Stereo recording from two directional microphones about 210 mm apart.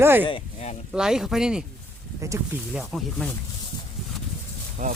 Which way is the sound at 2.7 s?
Centre (ahead or behind).